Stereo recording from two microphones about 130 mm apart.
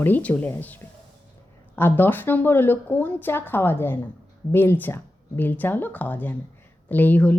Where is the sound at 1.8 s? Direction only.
15° left (ahead or behind).